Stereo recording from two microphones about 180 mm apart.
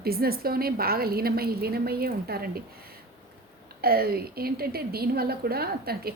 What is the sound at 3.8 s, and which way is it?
Speech, 55° right (ahead or behind).